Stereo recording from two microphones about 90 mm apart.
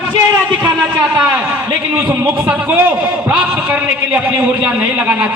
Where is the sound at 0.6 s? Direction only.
15° right (ahead or behind).